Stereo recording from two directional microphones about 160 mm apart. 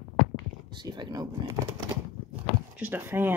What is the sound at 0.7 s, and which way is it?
Speech, 30° right (ahead or behind).